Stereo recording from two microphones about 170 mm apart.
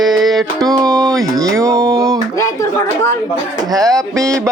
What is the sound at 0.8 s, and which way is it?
Speech, 20° right (ahead or behind).